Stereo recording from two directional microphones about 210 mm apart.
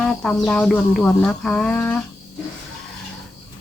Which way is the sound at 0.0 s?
5° left (ahead or behind).